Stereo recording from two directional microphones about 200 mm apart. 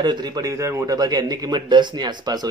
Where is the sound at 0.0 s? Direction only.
20° right (ahead or behind).